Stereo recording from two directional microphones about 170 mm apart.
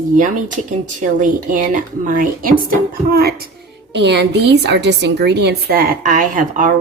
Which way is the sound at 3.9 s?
85° right.